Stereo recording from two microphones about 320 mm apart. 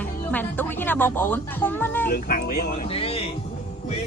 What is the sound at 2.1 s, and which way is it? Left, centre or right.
Speech, left.